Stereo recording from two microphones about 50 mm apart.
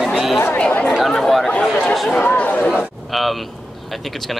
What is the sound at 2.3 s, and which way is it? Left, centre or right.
Speech, left.